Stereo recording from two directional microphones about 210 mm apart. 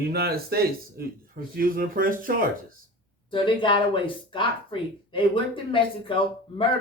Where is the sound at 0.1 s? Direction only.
45° right (ahead or behind).